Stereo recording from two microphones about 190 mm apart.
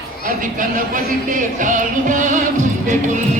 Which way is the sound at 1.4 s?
40° right (ahead or behind).